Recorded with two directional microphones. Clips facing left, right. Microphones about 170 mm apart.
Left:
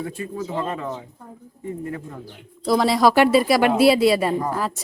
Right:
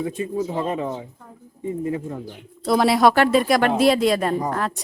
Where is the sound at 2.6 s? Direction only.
Centre (ahead or behind).